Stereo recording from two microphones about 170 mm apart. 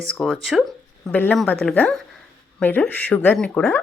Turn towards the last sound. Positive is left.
turn(degrees=5)  # may be behind; listen again after turning